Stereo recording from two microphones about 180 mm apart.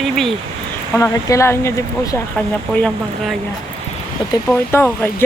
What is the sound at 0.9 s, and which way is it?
Speech, 15° left (ahead or behind).